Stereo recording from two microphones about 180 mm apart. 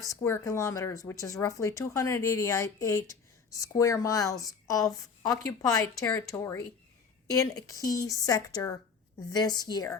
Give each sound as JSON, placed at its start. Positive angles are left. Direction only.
{"t": 0.1, "sound": "a woman's voice", "side_deg": 15}